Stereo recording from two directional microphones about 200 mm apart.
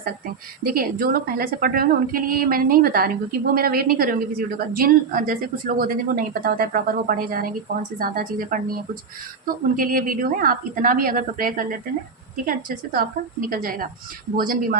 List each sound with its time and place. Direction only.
0.0 s a woman's voice: 45° right (ahead or behind)
9.7 s a woman's voice: 45° right (ahead or behind)